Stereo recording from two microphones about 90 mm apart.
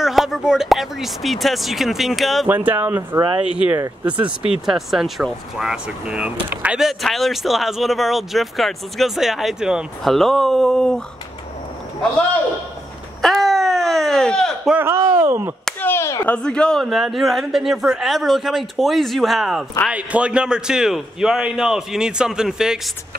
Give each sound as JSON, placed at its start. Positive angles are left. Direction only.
{"t": 0.0, "sound": "speech", "side_deg": -5}
{"t": 2.4, "sound": "a man's voice", "side_deg": -20}
{"t": 6.8, "sound": "speech", "side_deg": 0}
{"t": 13.2, "sound": "a sound", "side_deg": 0}
{"t": 14.8, "sound": "speech", "side_deg": -30}
{"t": 15.8, "sound": "speech", "side_deg": 25}
{"t": 16.3, "sound": "speech", "side_deg": 10}
{"t": 16.8, "sound": "speech", "side_deg": -5}
{"t": 19.9, "sound": "a man's voice", "side_deg": -15}